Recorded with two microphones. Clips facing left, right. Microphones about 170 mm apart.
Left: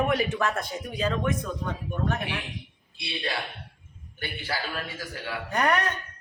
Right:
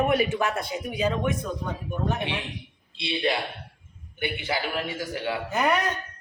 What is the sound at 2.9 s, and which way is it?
A man's voice, 20° right (ahead or behind).